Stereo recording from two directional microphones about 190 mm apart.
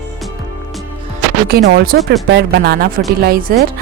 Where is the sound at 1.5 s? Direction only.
55° right (ahead or behind).